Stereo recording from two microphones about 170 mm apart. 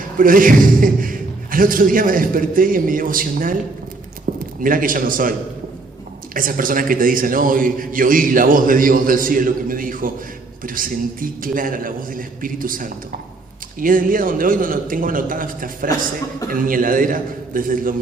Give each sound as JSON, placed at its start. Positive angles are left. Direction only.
{"t": 0.2, "sound": "a man's voice", "side_deg": -55}
{"t": 4.3, "sound": "a sound", "side_deg": -50}
{"t": 4.6, "sound": "a man's voice", "side_deg": -55}
{"t": 6.3, "sound": "a man's voice", "side_deg": -55}